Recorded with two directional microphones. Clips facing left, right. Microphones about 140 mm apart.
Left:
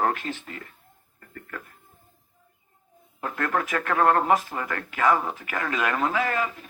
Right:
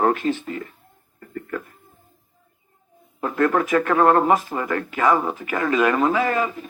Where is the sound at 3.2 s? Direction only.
15° right (ahead or behind).